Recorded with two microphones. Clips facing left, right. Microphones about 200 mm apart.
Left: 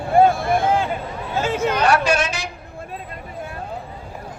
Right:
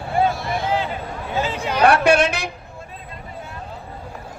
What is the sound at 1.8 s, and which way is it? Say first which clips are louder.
Speech: right 7 dB; 60° right (ahead or behind).